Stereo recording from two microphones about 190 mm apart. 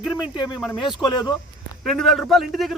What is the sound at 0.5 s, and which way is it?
A man's voice, centre (ahead or behind).